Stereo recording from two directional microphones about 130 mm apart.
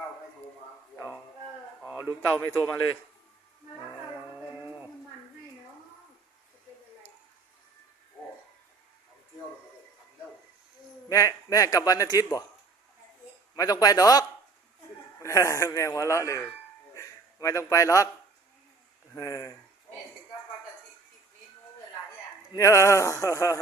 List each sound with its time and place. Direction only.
2.2 s speech: 15° left (ahead or behind)
11.1 s a man's voice: 25° left (ahead or behind)
13.6 s a man's voice: 30° left (ahead or behind)
16.9 s a sound: 25° left (ahead or behind)
19.1 s a man's voice: 25° left (ahead or behind)
22.5 s a man's voice: 25° left (ahead or behind)